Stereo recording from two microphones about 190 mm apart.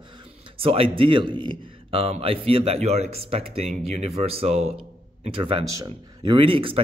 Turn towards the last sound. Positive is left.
turn(degrees=-30)  # may be behind; listen again after turning